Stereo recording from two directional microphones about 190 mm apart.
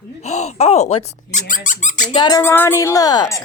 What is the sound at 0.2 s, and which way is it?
Speech, 35° left (ahead or behind).